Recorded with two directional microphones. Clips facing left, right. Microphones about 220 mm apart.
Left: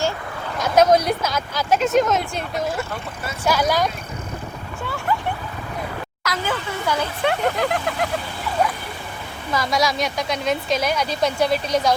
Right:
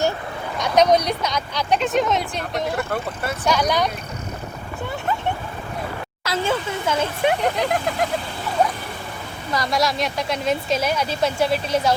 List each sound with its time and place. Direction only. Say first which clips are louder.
0.6 s a woman's voice: left 1 dB; 5° left (ahead or behind)
2.7 s speech: right 3 dB; 55° right (ahead or behind)
3.5 s a woman's voice: left 1 dB; 5° left (ahead or behind)
6.2 s speech: right 3 dB; 25° right (ahead or behind)
9.5 s a woman's voice: even; centre (ahead or behind)